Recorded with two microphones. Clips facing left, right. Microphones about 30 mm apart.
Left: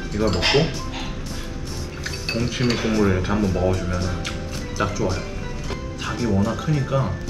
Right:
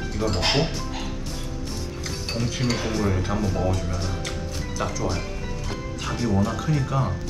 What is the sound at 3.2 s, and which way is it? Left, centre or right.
Speech, centre.